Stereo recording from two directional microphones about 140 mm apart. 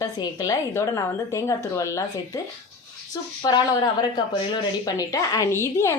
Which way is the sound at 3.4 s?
30° left (ahead or behind).